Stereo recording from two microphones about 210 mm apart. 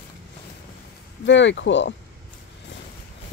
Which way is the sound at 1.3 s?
60° left (ahead or behind).